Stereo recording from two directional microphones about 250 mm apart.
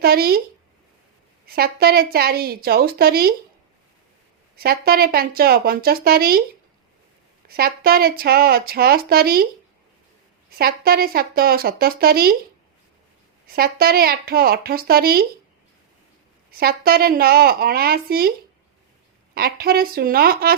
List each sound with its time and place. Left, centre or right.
0.0 s speech: right
1.5 s speech: right
4.5 s speech: right
7.4 s speech: right
10.6 s speech: right
13.5 s speech: right
16.5 s speech: right